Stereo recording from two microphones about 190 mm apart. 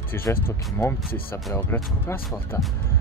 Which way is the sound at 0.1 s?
10° left (ahead or behind).